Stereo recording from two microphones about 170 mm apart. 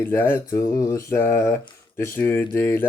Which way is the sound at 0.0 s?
15° left (ahead or behind).